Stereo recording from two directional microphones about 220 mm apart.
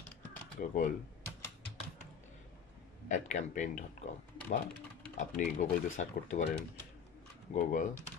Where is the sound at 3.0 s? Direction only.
35° left (ahead or behind).